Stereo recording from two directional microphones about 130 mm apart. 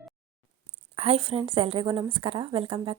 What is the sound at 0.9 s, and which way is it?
Speech, 55° right (ahead or behind).